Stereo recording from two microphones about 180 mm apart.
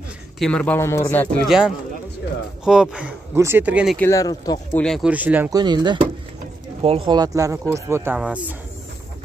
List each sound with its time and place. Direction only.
0.4 s speech: 5° left (ahead or behind)
2.6 s speech: 5° right (ahead or behind)
4.0 s speech: 20° left (ahead or behind)
4.7 s speech: 5° left (ahead or behind)
5.1 s speech: 10° right (ahead or behind)
5.5 s speech: 25° right (ahead or behind); by 8.5 s 5° right (ahead or behind)